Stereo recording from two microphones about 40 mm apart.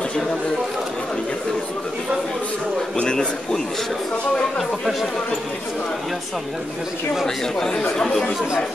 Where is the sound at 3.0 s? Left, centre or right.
Centre.